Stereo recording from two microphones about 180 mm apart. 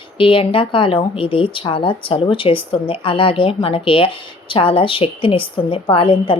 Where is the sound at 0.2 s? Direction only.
30° left (ahead or behind).